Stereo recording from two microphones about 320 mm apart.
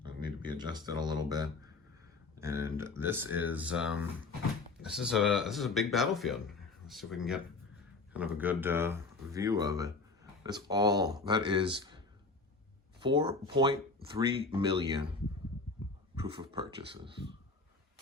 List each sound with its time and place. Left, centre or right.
0.0 s speech: centre
13.0 s speech: centre
16.2 s speech: centre